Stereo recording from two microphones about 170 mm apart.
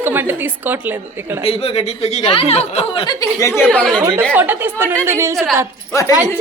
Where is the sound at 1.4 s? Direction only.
35° left (ahead or behind); by 4.0 s 5° left (ahead or behind).